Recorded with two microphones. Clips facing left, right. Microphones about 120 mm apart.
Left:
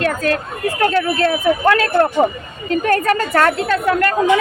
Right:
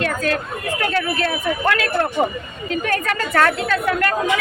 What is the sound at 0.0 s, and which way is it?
Speech, 40° left (ahead or behind).